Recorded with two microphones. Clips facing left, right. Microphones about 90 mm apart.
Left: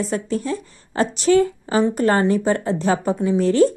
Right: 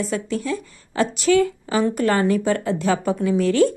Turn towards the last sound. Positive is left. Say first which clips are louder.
# left 1 dB
turn(degrees=35)  # may be behind; listen again after turning